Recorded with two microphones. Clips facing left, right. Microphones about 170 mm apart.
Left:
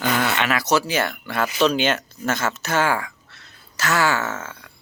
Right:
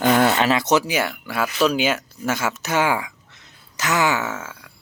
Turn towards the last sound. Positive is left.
turn(degrees=-5)  # may be behind; listen again after turning